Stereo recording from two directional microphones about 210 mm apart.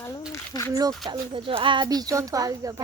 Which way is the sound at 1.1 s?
25° right (ahead or behind).